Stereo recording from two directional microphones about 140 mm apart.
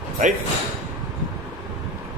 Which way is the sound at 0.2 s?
65° right (ahead or behind).